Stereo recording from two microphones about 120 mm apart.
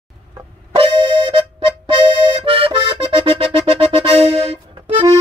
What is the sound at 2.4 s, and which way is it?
Music, 50° right (ahead or behind).